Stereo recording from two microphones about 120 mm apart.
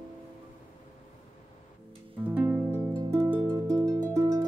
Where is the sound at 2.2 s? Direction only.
15° right (ahead or behind).